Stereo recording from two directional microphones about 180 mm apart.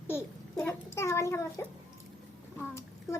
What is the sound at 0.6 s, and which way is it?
A child's voice, 15° left (ahead or behind).